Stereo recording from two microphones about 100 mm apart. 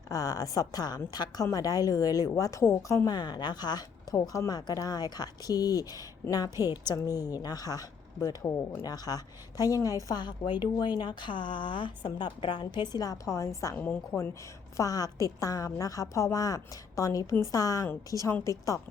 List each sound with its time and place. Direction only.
0.1 s a woman's voice: 40° left (ahead or behind)
3.1 s a woman's voice: 45° left (ahead or behind)
13.0 s a woman's voice: 35° left (ahead or behind)
13.7 s a woman's voice: 20° left (ahead or behind)
14.8 s a woman's voice: 40° left (ahead or behind)